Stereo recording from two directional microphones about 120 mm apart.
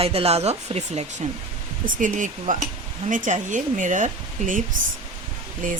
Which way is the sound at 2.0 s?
90° right.